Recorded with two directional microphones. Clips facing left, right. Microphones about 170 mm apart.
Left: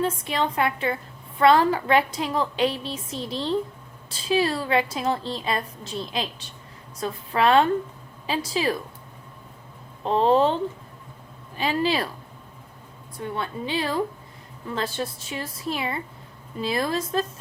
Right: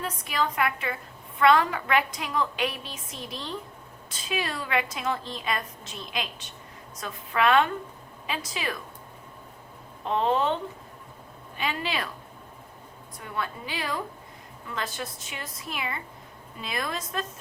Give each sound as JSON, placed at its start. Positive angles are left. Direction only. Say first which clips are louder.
{"t": 0.0, "sound": "a woman's voice", "louder": "left 5 dB", "side_deg": 25}
{"t": 10.0, "sound": "a woman's voice", "louder": "left 6 dB", "side_deg": 35}
{"t": 13.1, "sound": "a woman's voice", "louder": "left 4 dB", "side_deg": 30}